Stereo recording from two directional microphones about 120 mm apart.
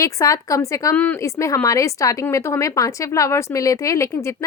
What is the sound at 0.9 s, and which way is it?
Speech, 10° left (ahead or behind).